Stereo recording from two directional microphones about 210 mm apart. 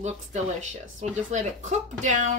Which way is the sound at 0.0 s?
35° right (ahead or behind).